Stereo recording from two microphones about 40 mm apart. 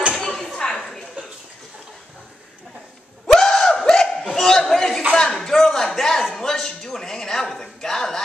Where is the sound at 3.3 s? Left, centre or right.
Centre.